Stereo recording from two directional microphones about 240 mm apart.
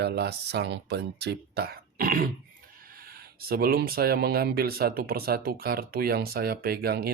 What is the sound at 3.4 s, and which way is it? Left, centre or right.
Speech, right.